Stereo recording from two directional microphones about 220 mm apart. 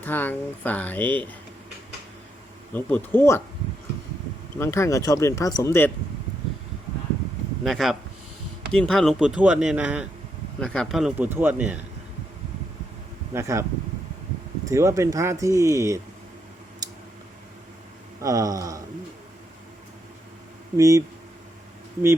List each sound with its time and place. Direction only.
0.0 s speech: 10° left (ahead or behind)
2.7 s speech: 10° left (ahead or behind)
4.5 s speech: 10° left (ahead or behind)
7.6 s speech: centre (ahead or behind)
13.3 s speech: 15° right (ahead or behind)
14.7 s speech: 15° right (ahead or behind)
16.8 s a sound: 15° right (ahead or behind)
18.2 s speech: 15° right (ahead or behind)
20.7 s speech: 15° right (ahead or behind)